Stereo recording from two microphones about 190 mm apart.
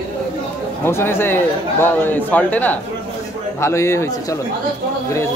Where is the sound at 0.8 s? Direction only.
10° left (ahead or behind).